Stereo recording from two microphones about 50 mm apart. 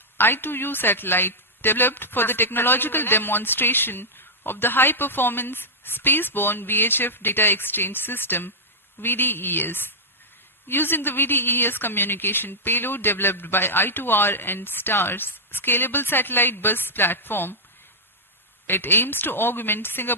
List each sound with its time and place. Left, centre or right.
0.2 s speech: left
18.7 s speech: left